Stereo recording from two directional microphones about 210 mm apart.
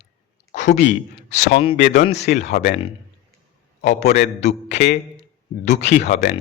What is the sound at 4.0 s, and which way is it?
A man's voice, 35° left (ahead or behind).